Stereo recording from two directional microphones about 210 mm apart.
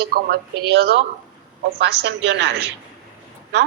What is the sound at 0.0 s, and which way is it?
A woman's voice, 50° right (ahead or behind).